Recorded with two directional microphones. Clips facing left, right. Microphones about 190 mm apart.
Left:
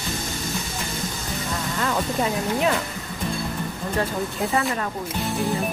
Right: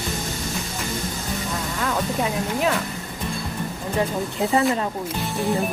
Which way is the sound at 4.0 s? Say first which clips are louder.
Right 2 dB; 20° right (ahead or behind).